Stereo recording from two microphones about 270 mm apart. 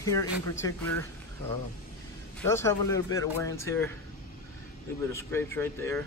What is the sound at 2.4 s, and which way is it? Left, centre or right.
Speech, centre.